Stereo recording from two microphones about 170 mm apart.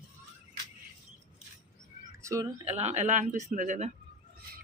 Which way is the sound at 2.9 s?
45° right (ahead or behind).